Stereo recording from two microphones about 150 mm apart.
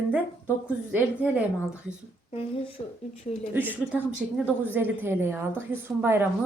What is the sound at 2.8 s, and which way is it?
Speech, 30° left (ahead or behind).